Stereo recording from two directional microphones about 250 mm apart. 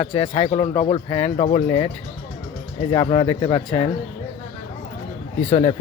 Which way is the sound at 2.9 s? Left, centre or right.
Centre.